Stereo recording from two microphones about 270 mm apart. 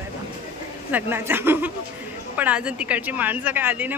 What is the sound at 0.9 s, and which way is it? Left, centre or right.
A woman's voice, centre.